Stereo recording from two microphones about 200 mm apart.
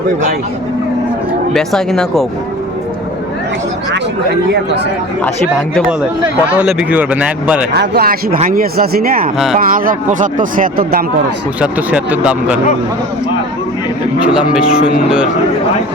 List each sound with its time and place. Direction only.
1.5 s speech: centre (ahead or behind)
6.5 s speech: 5° right (ahead or behind)
7.7 s speech: 50° right (ahead or behind)
11.6 s speech: 5° right (ahead or behind)
14.2 s speech: 5° right (ahead or behind)